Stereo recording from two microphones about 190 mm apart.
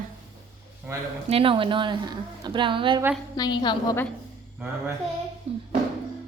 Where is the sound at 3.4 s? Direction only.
20° left (ahead or behind).